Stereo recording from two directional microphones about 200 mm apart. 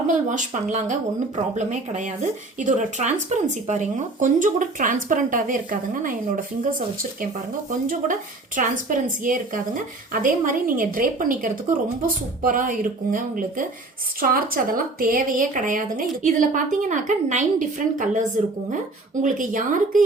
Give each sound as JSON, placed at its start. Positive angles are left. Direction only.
{"t": 0.1, "sound": "speech", "side_deg": -40}
{"t": 8.5, "sound": "a woman's voice", "side_deg": -40}
{"t": 19.2, "sound": "speech", "side_deg": -40}